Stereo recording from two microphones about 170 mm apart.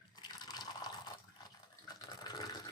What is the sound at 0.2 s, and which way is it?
Fill, 25° left (ahead or behind).